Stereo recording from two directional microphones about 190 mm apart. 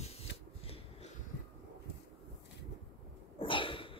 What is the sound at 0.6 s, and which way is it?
Finger snapping, 30° left (ahead or behind).